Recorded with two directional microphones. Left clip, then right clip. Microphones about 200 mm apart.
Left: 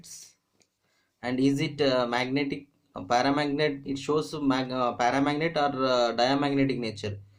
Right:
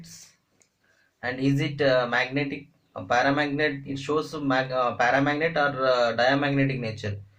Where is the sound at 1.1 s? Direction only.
45° left (ahead or behind).